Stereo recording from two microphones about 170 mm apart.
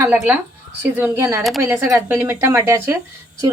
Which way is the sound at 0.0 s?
10° right (ahead or behind).